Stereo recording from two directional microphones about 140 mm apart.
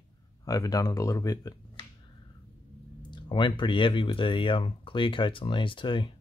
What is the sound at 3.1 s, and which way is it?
Speech, 35° left (ahead or behind).